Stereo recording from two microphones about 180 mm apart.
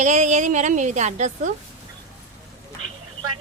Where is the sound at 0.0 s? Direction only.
40° right (ahead or behind).